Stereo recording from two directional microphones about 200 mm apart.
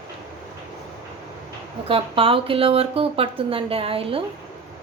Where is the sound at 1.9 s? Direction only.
25° right (ahead or behind).